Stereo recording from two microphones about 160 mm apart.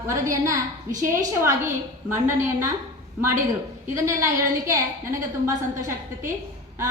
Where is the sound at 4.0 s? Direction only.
20° right (ahead or behind).